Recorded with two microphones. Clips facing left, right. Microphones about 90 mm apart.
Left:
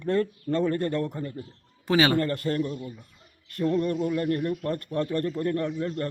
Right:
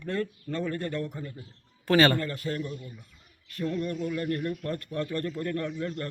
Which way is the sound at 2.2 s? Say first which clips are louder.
Left 6 dB; 50° left (ahead or behind).